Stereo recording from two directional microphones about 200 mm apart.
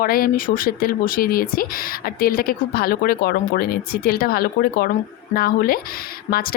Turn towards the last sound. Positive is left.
turn(degrees=45)  # may be behind; listen again after turning